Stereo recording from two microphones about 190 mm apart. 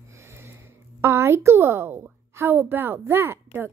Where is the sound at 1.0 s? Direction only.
15° right (ahead or behind).